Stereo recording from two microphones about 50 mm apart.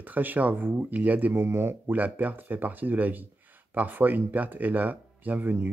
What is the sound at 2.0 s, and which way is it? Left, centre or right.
Speech, right.